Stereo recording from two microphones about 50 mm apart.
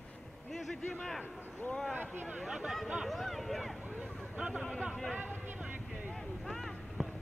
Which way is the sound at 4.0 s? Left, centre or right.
Right.